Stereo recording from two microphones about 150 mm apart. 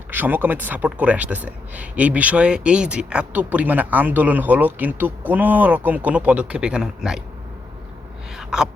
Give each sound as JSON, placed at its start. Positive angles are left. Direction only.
{"t": 0.1, "sound": "speech", "side_deg": -10}
{"t": 8.4, "sound": "gasp", "side_deg": -5}